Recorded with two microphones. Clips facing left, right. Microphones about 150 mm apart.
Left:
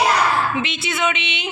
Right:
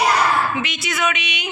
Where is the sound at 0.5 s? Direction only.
25° left (ahead or behind).